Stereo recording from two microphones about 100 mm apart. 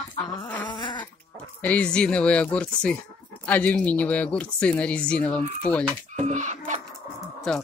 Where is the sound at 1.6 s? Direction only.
15° left (ahead or behind).